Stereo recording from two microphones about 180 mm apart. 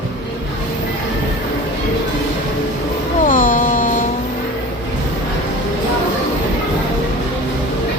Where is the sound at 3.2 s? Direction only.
50° left (ahead or behind).